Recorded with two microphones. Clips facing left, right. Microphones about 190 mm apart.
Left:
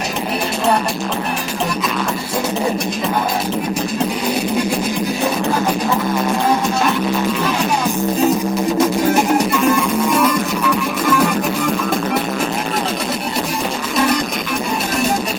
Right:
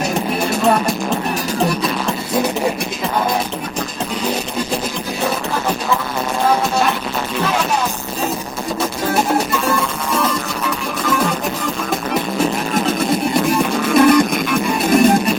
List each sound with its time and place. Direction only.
13.9 s music: 55° right (ahead or behind)